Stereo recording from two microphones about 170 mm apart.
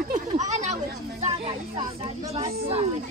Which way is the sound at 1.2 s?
35° right (ahead or behind).